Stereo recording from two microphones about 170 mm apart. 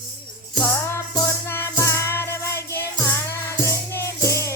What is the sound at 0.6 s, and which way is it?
Music, 15° left (ahead or behind).